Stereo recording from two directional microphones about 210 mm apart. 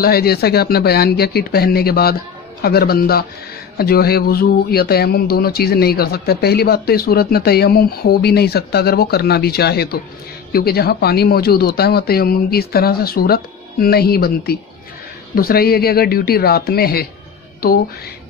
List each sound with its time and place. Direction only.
0.0 s speech: 45° left (ahead or behind)